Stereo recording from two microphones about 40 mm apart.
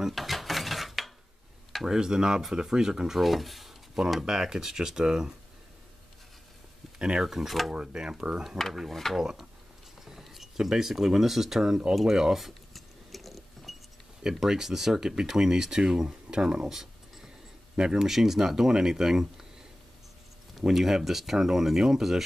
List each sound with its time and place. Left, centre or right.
0.1 s drawer open or close: centre
1.9 s speech: centre
3.2 s speech: centre
7.0 s speech: right
7.2 s speech: centre
7.7 s speech: right
9.1 s speech: centre
12.4 s a sound: centre
14.3 s speech: centre
18.0 s speech: centre
20.6 s speech: centre